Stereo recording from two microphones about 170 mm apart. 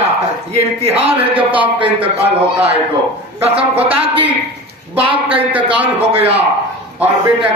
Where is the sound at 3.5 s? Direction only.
35° right (ahead or behind).